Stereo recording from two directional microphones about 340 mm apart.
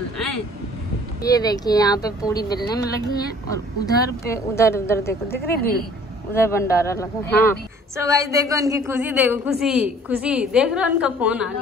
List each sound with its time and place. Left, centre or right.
1.2 s speech: centre
5.3 s speech: left
6.3 s speech: centre
7.9 s a woman's voice: centre